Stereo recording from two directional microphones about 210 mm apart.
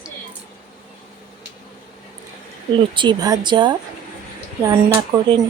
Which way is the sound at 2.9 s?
20° right (ahead or behind).